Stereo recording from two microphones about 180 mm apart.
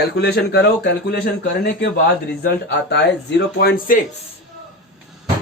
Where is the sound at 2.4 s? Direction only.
70° left (ahead or behind); by 4.0 s 50° left (ahead or behind).